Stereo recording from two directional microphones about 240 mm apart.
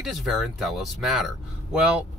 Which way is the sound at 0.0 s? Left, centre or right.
Centre.